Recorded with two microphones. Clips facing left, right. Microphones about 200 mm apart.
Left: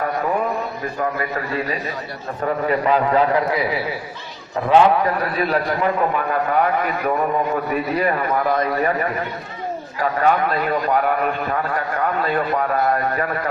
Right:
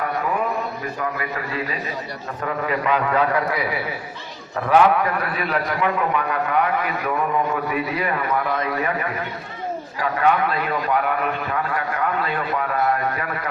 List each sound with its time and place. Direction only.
1.2 s a man's voice: 40° left (ahead or behind)